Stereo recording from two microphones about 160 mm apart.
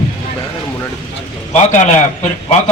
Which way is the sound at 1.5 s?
45° left (ahead or behind).